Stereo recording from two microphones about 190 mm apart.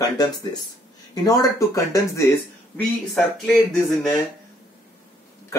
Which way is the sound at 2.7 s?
5° left (ahead or behind).